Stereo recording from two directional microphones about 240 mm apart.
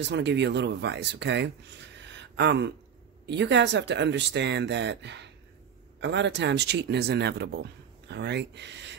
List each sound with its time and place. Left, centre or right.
0.1 s speech: right